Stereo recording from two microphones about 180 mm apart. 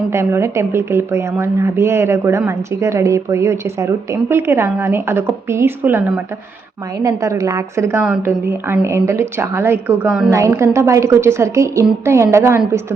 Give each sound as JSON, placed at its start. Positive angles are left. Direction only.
{"t": 0.1, "sound": "a woman's voice", "side_deg": -15}